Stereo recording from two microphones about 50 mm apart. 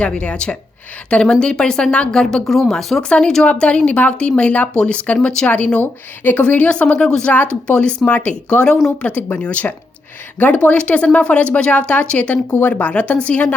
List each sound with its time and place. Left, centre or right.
0.0 s speech: left